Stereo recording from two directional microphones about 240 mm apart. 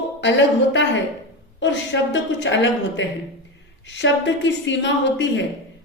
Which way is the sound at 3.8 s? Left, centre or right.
Left.